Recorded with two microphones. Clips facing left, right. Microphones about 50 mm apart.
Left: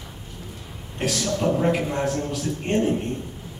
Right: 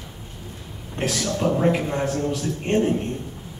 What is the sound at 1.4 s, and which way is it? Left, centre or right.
Speech, centre.